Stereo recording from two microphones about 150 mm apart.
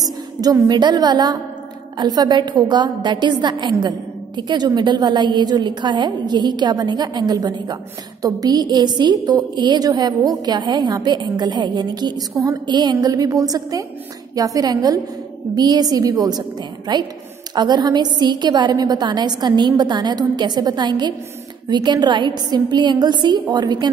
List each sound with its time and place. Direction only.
0.0 s a woman's voice: 25° right (ahead or behind)